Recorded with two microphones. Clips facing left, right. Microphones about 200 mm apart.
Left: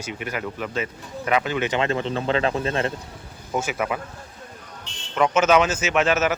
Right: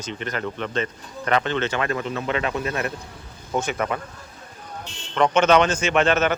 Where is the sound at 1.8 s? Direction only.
25° left (ahead or behind).